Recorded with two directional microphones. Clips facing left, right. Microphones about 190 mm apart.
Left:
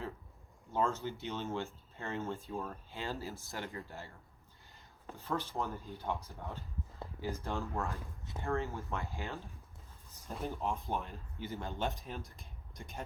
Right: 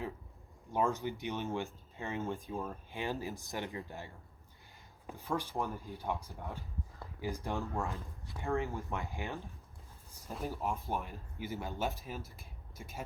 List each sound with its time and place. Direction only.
0.7 s speech: 15° right (ahead or behind)
10.1 s speech: centre (ahead or behind)